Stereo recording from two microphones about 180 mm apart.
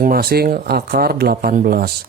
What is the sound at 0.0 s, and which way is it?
Speech, 55° right (ahead or behind).